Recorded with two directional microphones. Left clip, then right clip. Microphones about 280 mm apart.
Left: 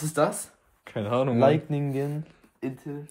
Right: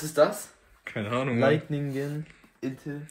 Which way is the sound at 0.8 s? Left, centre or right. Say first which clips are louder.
Left 3 dB; centre.